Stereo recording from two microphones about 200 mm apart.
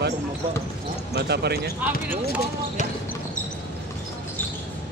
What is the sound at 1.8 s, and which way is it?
Speech, 10° right (ahead or behind).